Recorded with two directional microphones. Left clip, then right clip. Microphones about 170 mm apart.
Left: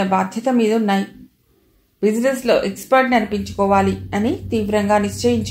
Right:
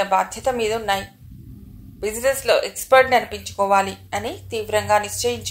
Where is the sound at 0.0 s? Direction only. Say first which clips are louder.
Left 1 dB; 30° right (ahead or behind).